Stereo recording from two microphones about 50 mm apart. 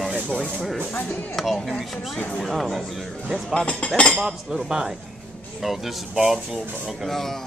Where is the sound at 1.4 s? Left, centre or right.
Centre.